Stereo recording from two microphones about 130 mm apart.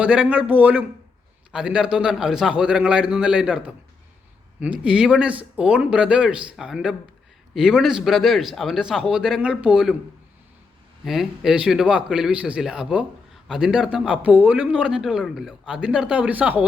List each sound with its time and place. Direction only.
0.0 s a man's voice: 10° right (ahead or behind)
11.0 s a man's voice: centre (ahead or behind)